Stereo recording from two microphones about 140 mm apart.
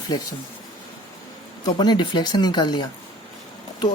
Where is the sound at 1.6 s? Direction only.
30° left (ahead or behind).